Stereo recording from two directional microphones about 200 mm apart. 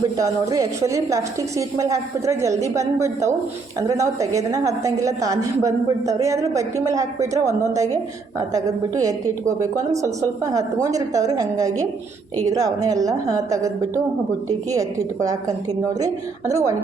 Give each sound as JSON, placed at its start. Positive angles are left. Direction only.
{"t": 0.2, "sound": "a woman's voice", "side_deg": -15}